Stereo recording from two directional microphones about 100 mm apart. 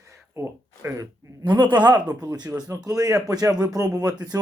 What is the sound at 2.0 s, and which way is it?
Speech, 45° right (ahead or behind).